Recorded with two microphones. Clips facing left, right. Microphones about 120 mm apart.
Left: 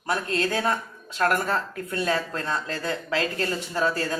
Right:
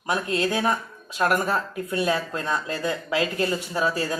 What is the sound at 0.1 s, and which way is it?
Speech, 15° right (ahead or behind).